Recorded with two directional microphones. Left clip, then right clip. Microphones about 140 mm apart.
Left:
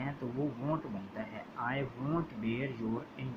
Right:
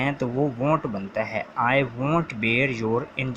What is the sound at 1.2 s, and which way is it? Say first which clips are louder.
Speech: right 16 dB; 40° right (ahead or behind).